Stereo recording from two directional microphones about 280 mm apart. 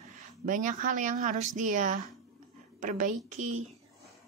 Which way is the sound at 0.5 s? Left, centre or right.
Right.